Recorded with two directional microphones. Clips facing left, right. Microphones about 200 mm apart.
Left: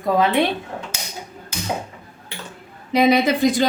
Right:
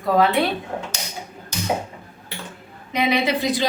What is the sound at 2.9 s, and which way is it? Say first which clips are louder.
Speech: left 5 dB; 40° left (ahead or behind).